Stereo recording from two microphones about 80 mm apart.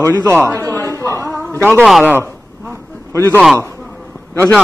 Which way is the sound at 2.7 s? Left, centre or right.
Left.